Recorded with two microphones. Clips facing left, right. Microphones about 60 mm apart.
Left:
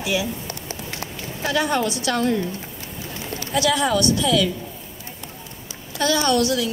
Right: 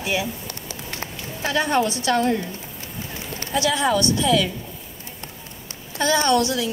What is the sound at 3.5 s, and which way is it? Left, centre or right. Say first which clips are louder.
Speech: even; right.